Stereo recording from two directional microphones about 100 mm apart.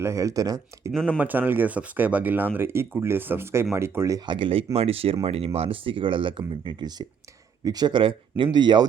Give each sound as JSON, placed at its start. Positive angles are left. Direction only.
{"t": 0.0, "sound": "speech", "side_deg": -30}
{"t": 0.9, "sound": "speech", "side_deg": 10}
{"t": 1.2, "sound": "speech", "side_deg": -20}
{"t": 4.3, "sound": "speech", "side_deg": -60}
{"t": 5.5, "sound": "speech", "side_deg": -65}